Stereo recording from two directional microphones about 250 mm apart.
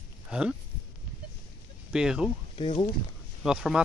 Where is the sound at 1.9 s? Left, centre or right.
Centre.